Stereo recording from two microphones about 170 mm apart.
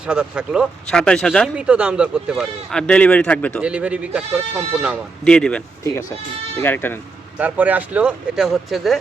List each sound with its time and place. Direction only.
0.0 s speech: 5° right (ahead or behind)
1.5 s speech: 5° right (ahead or behind)
3.6 s speech: 5° right (ahead or behind)
5.2 s speech: 5° left (ahead or behind)
5.8 s speech: 15° left (ahead or behind)
7.3 s speech: 10° right (ahead or behind)